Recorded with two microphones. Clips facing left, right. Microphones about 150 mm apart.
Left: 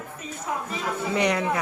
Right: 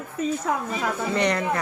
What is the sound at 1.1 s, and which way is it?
Speech, 5° left (ahead or behind).